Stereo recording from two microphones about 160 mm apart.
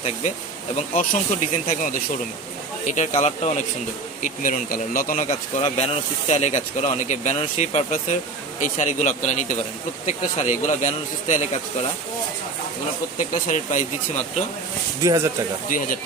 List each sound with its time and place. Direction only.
0.0 s speech: 45° left (ahead or behind)
4.2 s speech: 60° left (ahead or behind)
13.1 s speech: 55° left (ahead or behind)
15.0 s speech: 20° right (ahead or behind)